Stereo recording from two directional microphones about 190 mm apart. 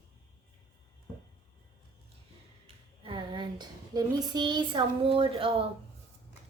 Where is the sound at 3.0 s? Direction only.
25° right (ahead or behind).